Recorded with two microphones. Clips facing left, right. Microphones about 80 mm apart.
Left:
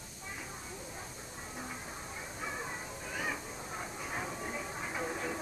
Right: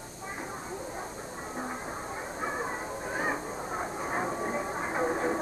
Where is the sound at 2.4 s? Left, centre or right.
Right.